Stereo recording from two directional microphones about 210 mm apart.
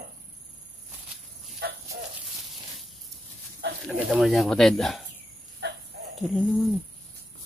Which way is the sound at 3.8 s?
5° right (ahead or behind).